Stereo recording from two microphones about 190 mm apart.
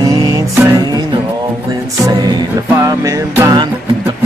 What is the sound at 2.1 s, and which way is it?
Music, 20° right (ahead or behind).